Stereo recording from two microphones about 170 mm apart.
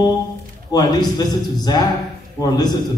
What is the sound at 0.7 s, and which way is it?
A man's voice, 25° left (ahead or behind).